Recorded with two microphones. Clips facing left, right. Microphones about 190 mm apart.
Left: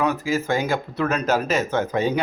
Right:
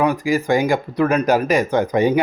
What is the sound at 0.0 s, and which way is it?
Speech, 15° right (ahead or behind).